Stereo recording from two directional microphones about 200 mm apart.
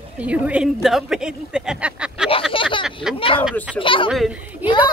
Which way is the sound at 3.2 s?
25° left (ahead or behind).